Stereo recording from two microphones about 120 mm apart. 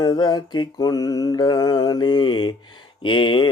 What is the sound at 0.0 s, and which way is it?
Speech, 35° left (ahead or behind).